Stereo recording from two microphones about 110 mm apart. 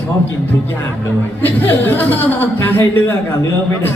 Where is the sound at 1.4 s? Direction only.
20° left (ahead or behind).